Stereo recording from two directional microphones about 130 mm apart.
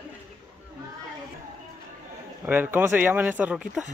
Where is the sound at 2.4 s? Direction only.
15° right (ahead or behind).